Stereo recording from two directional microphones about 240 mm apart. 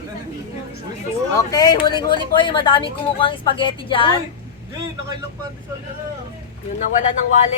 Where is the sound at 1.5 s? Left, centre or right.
Centre.